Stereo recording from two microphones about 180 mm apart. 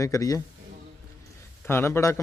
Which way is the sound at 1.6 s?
15° left (ahead or behind).